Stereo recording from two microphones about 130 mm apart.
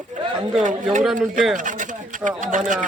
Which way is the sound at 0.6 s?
75° right (ahead or behind).